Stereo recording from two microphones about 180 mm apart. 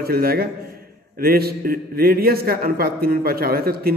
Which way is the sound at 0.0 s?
55° right (ahead or behind).